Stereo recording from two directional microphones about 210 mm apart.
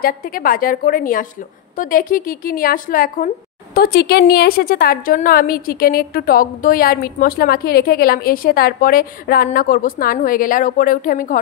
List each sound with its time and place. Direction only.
0.0 s a woman's voice: 40° left (ahead or behind)